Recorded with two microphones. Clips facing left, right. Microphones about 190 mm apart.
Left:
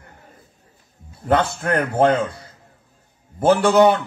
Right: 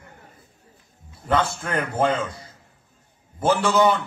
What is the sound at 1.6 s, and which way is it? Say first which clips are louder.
A man's voice: left 5 dB; 60° left (ahead or behind).